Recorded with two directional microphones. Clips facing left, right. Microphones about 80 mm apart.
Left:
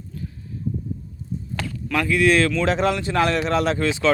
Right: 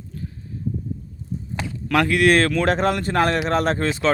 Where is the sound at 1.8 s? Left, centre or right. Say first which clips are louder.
Right 2 dB; right.